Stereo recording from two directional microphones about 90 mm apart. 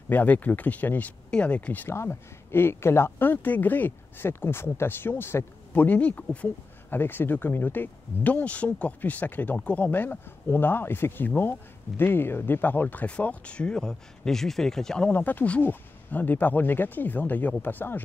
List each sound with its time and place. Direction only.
0.1 s speech: 20° left (ahead or behind)